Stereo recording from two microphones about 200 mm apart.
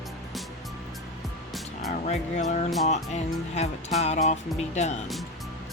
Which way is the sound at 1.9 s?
35° left (ahead or behind).